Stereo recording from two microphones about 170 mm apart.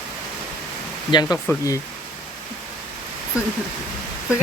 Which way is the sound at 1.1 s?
25° left (ahead or behind).